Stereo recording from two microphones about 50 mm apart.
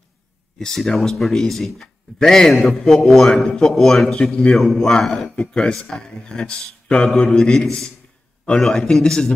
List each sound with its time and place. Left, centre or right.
0.6 s a man's voice: centre
2.5 s a man's voice: centre